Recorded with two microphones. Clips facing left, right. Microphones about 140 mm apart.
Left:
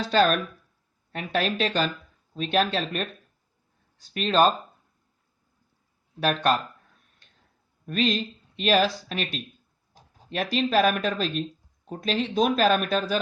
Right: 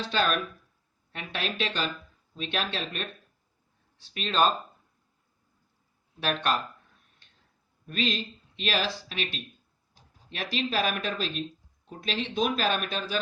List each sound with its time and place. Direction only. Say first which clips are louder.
0.0 s speech: left 6 dB; 40° left (ahead or behind)
6.1 s speech: left 5 dB; 40° left (ahead or behind)
7.9 s speech: left 5 dB; 45° left (ahead or behind)